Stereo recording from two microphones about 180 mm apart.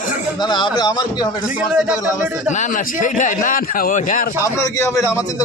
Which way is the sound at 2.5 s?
45° left (ahead or behind).